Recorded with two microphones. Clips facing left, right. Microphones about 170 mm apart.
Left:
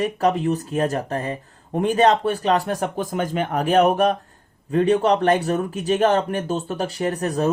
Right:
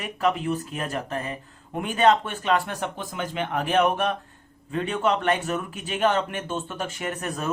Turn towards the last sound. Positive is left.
turn(degrees=35)  # may be behind; listen again after turning